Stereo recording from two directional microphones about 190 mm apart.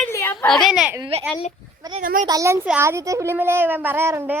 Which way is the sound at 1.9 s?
45° right (ahead or behind).